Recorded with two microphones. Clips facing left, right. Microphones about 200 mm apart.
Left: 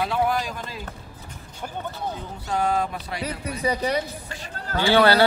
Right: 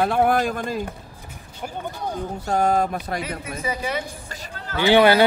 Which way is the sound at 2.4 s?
45° right (ahead or behind).